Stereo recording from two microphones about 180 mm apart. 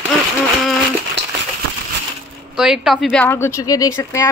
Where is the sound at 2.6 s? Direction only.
Centre (ahead or behind).